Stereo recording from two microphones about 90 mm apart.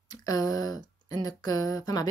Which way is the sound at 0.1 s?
45° left (ahead or behind).